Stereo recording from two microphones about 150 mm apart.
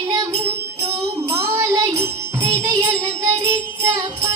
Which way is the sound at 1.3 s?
15° right (ahead or behind).